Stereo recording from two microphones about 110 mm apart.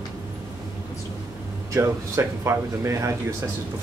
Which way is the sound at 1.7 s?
25° right (ahead or behind).